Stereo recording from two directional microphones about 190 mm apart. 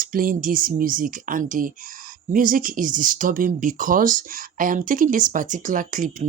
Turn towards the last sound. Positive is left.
turn(degrees=-45)  # may be behind; listen again after turning